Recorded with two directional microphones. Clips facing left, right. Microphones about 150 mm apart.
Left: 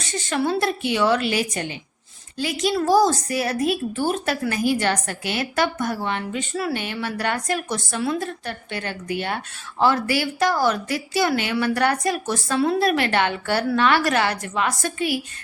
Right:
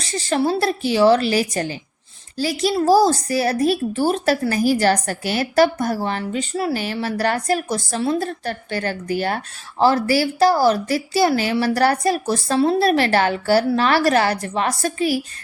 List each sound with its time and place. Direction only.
0.0 s a woman's voice: 35° right (ahead or behind)